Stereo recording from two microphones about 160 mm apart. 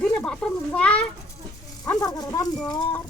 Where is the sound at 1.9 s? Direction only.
25° left (ahead or behind).